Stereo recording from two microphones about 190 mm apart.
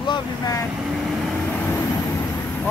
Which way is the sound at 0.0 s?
20° left (ahead or behind).